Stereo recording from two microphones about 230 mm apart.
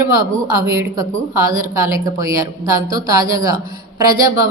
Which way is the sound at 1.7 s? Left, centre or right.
Centre.